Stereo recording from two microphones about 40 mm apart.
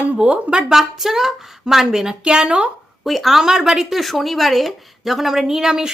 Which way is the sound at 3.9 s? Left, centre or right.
Centre.